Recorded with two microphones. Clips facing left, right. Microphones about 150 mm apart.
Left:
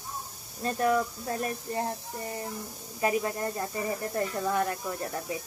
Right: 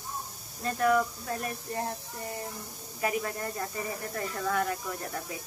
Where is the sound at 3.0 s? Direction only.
25° left (ahead or behind).